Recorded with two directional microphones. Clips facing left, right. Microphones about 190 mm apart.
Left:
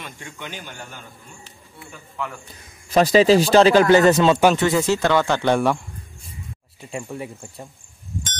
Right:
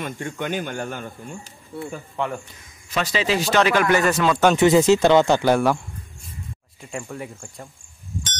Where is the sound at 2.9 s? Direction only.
40° left (ahead or behind).